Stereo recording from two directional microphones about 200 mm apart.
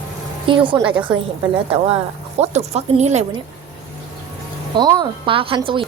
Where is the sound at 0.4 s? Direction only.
25° right (ahead or behind).